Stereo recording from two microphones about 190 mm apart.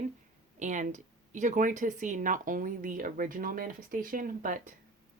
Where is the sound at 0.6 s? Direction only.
40° right (ahead or behind).